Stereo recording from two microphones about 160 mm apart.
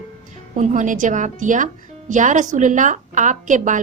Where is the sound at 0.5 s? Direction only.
55° right (ahead or behind).